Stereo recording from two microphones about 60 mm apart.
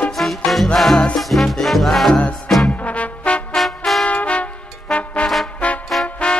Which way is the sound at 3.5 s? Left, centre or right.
Centre.